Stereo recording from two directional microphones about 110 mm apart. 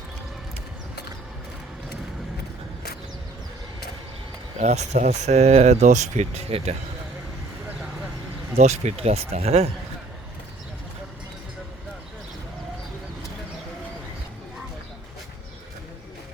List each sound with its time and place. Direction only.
4.6 s speech: 85° right
8.5 s speech: 80° right